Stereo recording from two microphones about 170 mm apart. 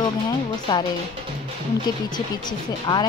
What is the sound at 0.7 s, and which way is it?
Speech, 25° left (ahead or behind).